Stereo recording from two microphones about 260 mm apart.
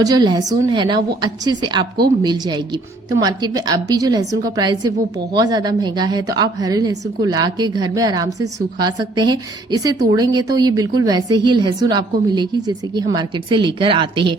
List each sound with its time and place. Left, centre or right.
0.0 s a woman's voice: centre